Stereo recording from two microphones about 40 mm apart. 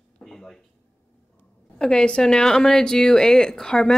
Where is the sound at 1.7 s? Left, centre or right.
Left.